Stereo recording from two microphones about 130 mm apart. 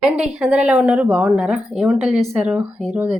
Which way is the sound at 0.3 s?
5° right (ahead or behind).